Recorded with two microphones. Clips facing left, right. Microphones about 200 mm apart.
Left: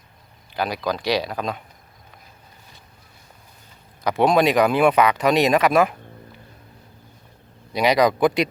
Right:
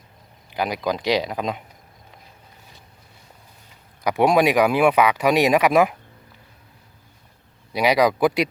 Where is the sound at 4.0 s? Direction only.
15° right (ahead or behind).